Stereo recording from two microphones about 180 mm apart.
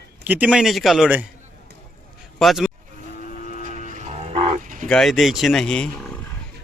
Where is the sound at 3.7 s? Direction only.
45° left (ahead or behind).